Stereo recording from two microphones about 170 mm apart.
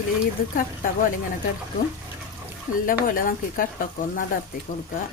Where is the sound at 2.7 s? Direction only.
50° left (ahead or behind).